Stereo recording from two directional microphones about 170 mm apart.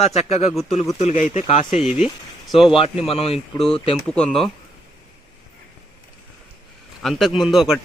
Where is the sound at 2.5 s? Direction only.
Centre (ahead or behind).